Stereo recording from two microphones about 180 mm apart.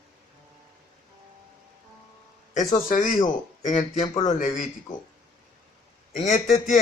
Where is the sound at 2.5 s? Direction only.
45° left (ahead or behind).